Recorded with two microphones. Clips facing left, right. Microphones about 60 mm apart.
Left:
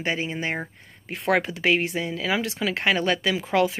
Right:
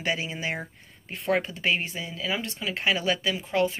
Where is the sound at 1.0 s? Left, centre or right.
Left.